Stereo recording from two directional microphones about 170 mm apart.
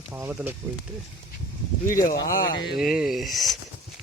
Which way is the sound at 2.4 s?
55° left (ahead or behind).